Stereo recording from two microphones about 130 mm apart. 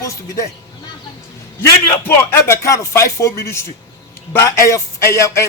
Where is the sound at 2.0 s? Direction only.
20° left (ahead or behind).